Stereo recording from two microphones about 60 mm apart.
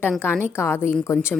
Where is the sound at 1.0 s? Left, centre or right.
Left.